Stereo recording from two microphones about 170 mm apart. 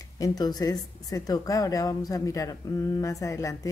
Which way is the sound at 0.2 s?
20° left (ahead or behind).